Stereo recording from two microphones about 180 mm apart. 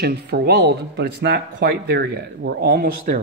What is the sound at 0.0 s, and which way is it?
Speech, 60° right (ahead or behind).